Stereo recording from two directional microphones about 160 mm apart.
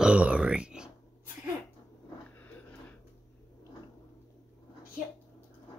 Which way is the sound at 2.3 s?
10° left (ahead or behind).